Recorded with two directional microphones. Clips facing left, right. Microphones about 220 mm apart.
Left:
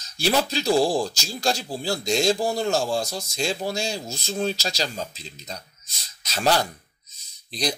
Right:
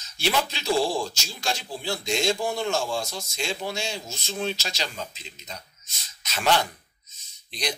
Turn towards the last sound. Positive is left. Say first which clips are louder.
# left 4 dB
turn(degrees=35)  # may be behind; listen again after turning